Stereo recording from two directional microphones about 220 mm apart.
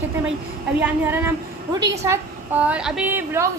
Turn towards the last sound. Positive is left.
turn(degrees=-10)  # may be behind; listen again after turning